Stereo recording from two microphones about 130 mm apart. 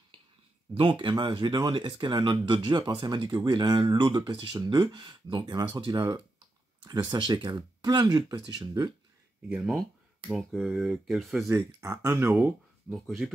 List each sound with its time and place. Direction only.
0.7 s speech: 40° right (ahead or behind)
9.7 s speech: centre (ahead or behind)
11.8 s speech: 25° right (ahead or behind)
12.1 s speech: 5° right (ahead or behind)